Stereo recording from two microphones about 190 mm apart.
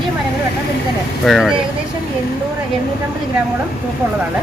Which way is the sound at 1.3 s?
Centre (ahead or behind).